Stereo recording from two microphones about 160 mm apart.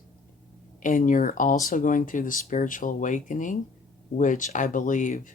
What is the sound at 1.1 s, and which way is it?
Speech, 55° left (ahead or behind).